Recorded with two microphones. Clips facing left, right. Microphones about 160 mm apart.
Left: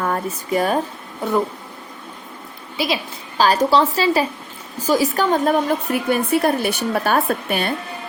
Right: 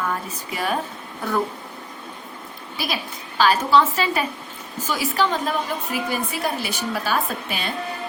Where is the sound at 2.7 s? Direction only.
25° left (ahead or behind).